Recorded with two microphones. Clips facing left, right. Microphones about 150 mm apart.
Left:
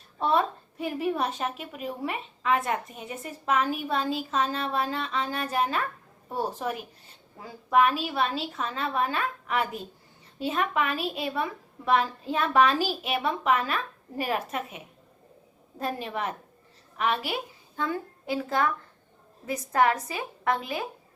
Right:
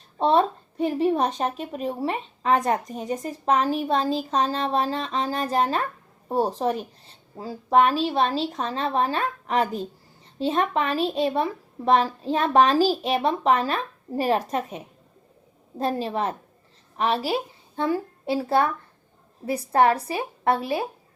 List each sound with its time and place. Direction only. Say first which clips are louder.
0.2 s a woman's voice: right 5 dB; 35° right (ahead or behind)